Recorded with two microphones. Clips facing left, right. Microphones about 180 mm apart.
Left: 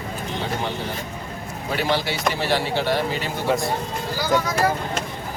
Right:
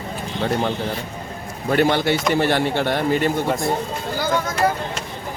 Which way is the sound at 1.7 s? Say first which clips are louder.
Right 6 dB; 55° right (ahead or behind).